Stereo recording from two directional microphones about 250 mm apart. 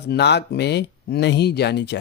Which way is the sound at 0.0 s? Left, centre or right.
Left.